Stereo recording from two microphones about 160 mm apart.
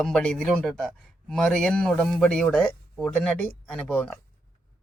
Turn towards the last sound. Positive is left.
turn(degrees=5)  # may be behind; listen again after turning